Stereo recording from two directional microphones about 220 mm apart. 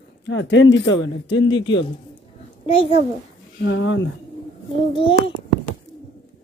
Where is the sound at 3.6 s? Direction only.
55° left (ahead or behind).